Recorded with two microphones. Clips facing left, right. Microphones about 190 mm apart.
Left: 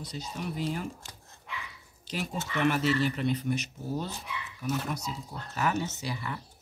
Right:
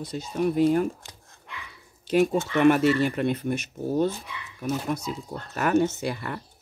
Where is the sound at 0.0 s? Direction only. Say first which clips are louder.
Right 11 dB; 55° right (ahead or behind).